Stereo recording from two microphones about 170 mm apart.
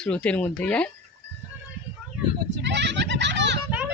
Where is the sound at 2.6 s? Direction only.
90° right.